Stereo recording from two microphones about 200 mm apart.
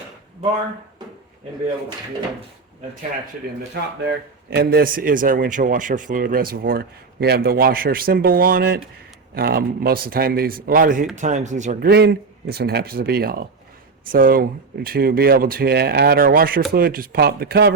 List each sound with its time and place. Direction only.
4.0 s a man's voice: 55° right (ahead or behind); by 11.9 s 35° right (ahead or behind)
11.9 s a man's voice: 55° right (ahead or behind)